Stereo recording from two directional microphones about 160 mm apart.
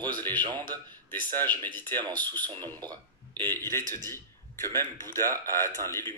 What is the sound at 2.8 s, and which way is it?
Speech, 25° right (ahead or behind).